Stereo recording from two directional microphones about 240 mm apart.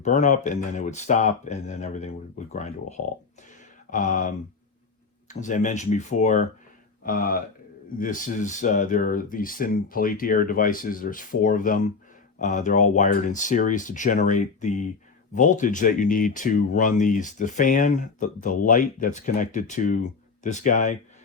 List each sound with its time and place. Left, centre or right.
0.0 s speech: left